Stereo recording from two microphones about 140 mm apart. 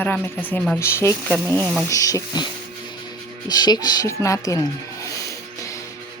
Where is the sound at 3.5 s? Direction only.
30° left (ahead or behind).